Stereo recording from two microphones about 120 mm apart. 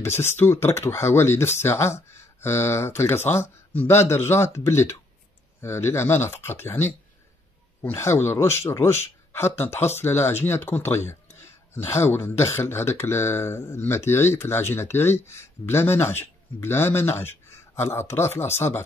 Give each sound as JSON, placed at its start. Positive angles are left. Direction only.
{"t": 0.2, "sound": "speech", "side_deg": 20}